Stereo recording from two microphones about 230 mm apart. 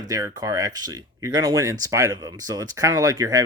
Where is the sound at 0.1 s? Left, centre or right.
Centre.